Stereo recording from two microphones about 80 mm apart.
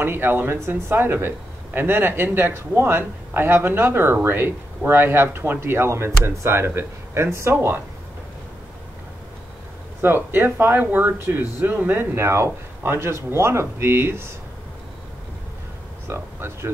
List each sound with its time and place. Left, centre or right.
0.0 s speech: right
10.0 s speech: right
16.1 s speech: right